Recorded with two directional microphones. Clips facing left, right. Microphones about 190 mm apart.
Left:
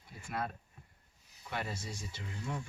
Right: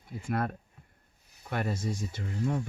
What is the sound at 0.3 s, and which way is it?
Speech, 55° right (ahead or behind).